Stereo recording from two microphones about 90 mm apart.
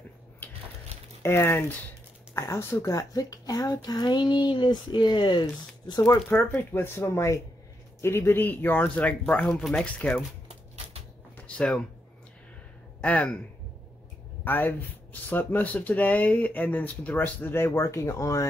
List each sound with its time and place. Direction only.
0.4 s crushing: 25° left (ahead or behind)
1.2 s a child's voice: 25° left (ahead or behind); by 6.1 s 50° left (ahead or behind)
6.2 s speech: 25° left (ahead or behind)
9.6 s speech: 5° left (ahead or behind)
9.8 s speech: 15° left (ahead or behind)
11.3 s a sound: 15° left (ahead or behind)
13.0 s speech: 15° left (ahead or behind)
14.4 s speech: 20° left (ahead or behind)